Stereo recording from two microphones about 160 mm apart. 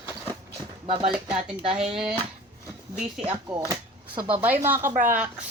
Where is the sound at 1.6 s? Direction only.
35° right (ahead or behind).